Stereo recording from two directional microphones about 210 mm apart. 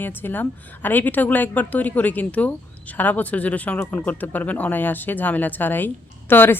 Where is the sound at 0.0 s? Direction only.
10° left (ahead or behind).